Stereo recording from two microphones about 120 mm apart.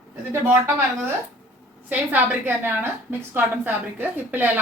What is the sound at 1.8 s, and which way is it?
A woman's voice, 15° right (ahead or behind).